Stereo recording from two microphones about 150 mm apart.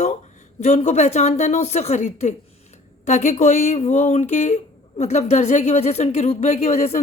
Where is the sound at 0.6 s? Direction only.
50° left (ahead or behind).